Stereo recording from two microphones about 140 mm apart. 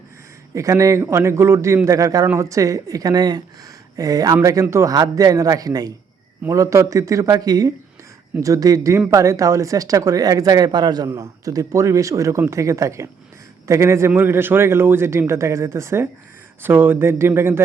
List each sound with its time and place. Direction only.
0.5 s speech: 25° right (ahead or behind)